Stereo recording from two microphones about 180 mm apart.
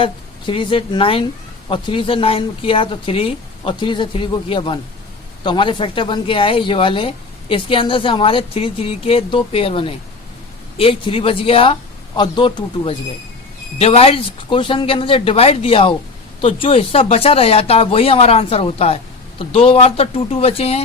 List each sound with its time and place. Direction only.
0.0 s a woman's voice: 30° left (ahead or behind)